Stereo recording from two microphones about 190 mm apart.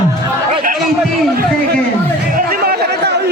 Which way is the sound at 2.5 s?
55° right (ahead or behind).